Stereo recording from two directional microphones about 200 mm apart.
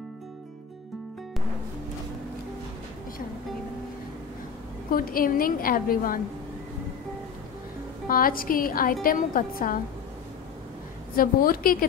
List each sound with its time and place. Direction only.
4.9 s a woman's voice: 45° left (ahead or behind)
8.1 s a woman's voice: 45° left (ahead or behind)
11.1 s a woman's voice: 45° left (ahead or behind)